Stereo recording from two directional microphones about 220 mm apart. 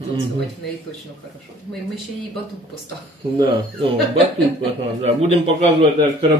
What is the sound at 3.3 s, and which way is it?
Speech, 25° right (ahead or behind).